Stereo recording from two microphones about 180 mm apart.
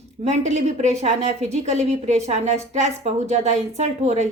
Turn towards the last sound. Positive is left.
turn(degrees=-35)  # may be behind; listen again after turning